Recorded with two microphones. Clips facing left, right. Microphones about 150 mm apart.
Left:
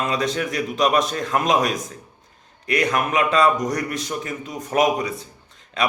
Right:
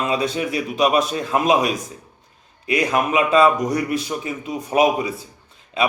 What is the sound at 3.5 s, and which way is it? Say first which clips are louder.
Speech: right 3 dB; 25° right (ahead or behind).